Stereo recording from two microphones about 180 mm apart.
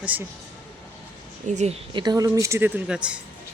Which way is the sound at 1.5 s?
40° right (ahead or behind).